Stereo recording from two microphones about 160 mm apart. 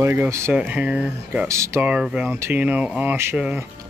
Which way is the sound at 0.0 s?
15° right (ahead or behind).